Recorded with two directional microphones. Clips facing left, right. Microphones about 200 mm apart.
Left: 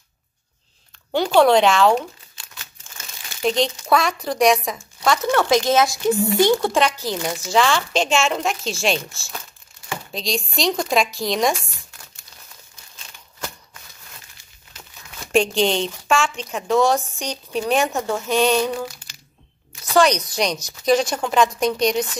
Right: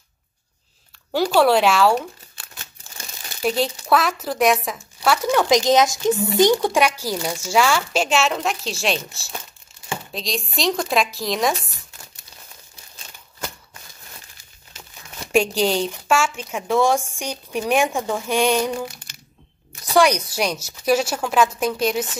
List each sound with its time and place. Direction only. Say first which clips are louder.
1.1 s a woman's voice: left 2 dB; 5° right (ahead or behind)
2.3 s a sound: right 1 dB; 45° right (ahead or behind)
3.4 s a woman's voice: left 1 dB; 5° right (ahead or behind)
7.2 s speech: left 1 dB; 10° left (ahead or behind)
7.4 s speech: even; 10° right (ahead or behind)
15.3 s a woman's voice: even; 5° right (ahead or behind)
19.9 s a woman's voice: even; 10° right (ahead or behind)